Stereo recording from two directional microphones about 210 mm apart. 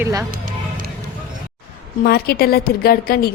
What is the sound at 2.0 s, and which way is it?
A woman's voice, 50° left (ahead or behind).